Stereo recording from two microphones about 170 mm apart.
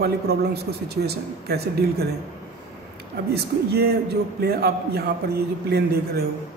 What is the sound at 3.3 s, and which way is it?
A man's voice, 70° right (ahead or behind).